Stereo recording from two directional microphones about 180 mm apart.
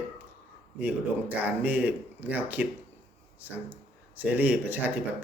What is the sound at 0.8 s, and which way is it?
Speech, 10° right (ahead or behind).